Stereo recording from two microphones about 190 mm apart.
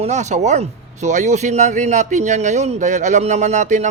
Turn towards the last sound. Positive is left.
turn(degrees=-40)  # may be behind; listen again after turning